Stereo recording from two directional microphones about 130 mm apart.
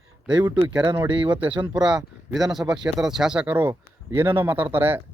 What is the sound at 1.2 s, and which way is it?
Speech, 10° right (ahead or behind).